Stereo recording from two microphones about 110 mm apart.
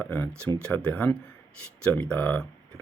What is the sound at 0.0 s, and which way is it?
Speech, 15° left (ahead or behind).